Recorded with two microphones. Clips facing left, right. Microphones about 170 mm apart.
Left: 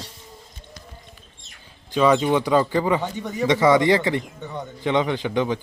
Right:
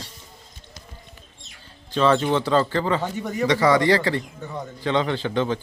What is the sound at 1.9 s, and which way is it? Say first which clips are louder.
Speech: left 1 dB; 10° left (ahead or behind).